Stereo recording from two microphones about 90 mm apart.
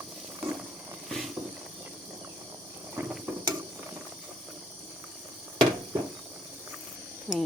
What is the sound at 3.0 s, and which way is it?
Ratchet, 25° right (ahead or behind).